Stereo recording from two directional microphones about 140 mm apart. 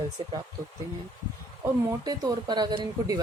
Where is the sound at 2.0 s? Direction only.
30° right (ahead or behind).